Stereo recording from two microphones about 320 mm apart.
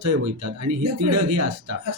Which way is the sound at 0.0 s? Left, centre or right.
Right.